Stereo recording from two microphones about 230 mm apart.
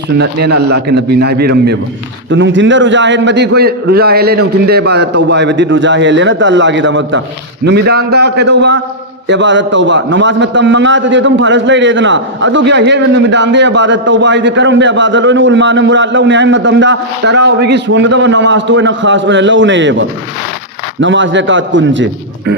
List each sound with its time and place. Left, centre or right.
0.2 s a man's voice: right